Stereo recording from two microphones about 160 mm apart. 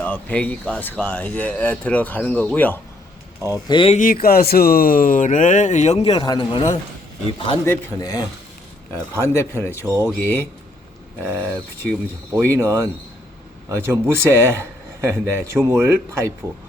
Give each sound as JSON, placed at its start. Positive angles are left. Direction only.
{"t": 0.0, "sound": "speech", "side_deg": 10}
{"t": 3.5, "sound": "speech", "side_deg": 30}
{"t": 3.9, "sound": "speech", "side_deg": 65}
{"t": 6.2, "sound": "a man's voice", "side_deg": 25}
{"t": 7.6, "sound": "speech", "side_deg": 15}
{"t": 9.6, "sound": "speech", "side_deg": -15}
{"t": 10.2, "sound": "speech", "side_deg": 10}
{"t": 11.2, "sound": "speech", "side_deg": -15}
{"t": 12.5, "sound": "speech", "side_deg": -15}